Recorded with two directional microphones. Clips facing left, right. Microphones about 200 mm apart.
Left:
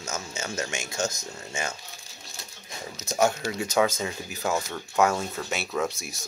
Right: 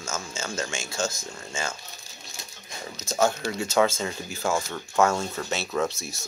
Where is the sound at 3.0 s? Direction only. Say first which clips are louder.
Even; 10° left (ahead or behind).